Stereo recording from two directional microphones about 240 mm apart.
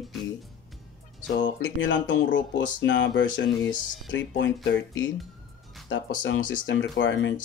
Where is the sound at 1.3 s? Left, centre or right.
Left.